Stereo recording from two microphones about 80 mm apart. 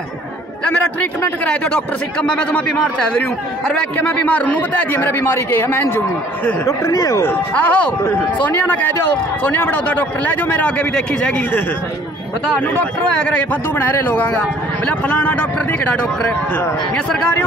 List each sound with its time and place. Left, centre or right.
1.4 s a man's voice: centre; by 6.9 s left
6.9 s speech: left
7.5 s a man's voice: centre
13.5 s a man's voice: left